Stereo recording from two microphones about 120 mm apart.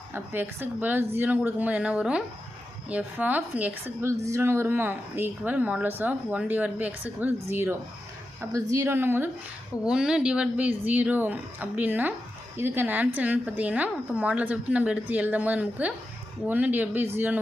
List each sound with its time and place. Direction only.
0.1 s a woman's voice: 15° right (ahead or behind)
9.8 s a woman's voice: 5° right (ahead or behind)